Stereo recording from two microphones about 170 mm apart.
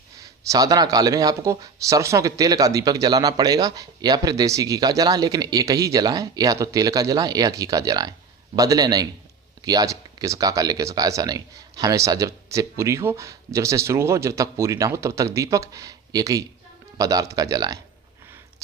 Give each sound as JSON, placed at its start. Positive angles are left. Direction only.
{"t": 0.2, "sound": "speech", "side_deg": -20}